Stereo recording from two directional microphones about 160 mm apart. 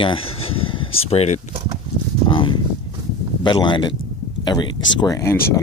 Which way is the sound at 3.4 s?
30° left (ahead or behind).